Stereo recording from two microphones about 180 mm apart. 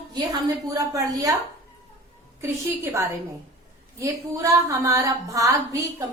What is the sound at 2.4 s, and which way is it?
A woman's voice, 15° right (ahead or behind).